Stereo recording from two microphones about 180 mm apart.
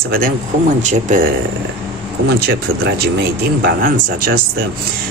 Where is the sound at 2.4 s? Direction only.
65° right (ahead or behind).